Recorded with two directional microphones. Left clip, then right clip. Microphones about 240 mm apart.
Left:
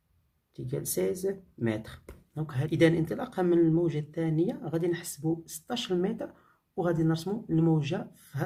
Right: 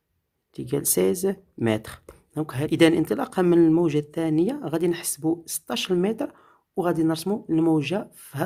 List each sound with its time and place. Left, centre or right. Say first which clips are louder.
0.5 s speech: right 8 dB; right